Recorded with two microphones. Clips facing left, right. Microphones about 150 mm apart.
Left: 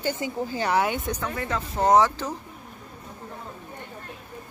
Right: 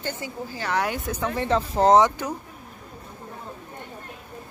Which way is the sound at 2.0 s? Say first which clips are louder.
Right 2 dB; 15° right (ahead or behind).